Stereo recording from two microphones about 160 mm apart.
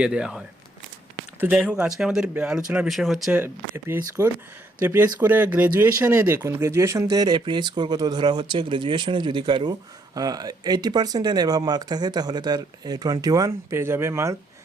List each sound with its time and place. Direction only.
0.0 s speech: 5° right (ahead or behind)
3.3 s speech: 15° right (ahead or behind)